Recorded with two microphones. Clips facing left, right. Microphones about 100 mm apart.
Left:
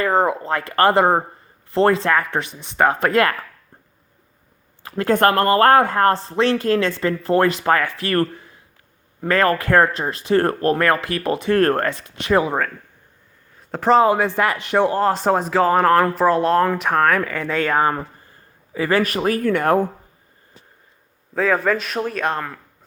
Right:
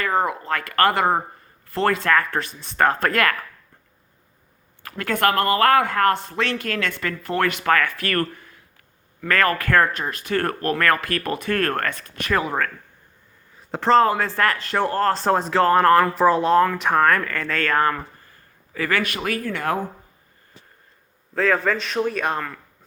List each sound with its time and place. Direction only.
0.0 s speech: 30° left (ahead or behind)
4.8 s a sound: 25° left (ahead or behind)
5.1 s speech: 40° left (ahead or behind); by 11.6 s 25° left (ahead or behind)
11.6 s a man's voice: 35° left (ahead or behind)
11.9 s speech: 20° left (ahead or behind)
13.6 s a sound: centre (ahead or behind)
13.8 s a man's voice: 15° left (ahead or behind); by 19.4 s 35° left (ahead or behind)
19.4 s speech: 50° left (ahead or behind)
21.3 s a man's voice: 5° left (ahead or behind)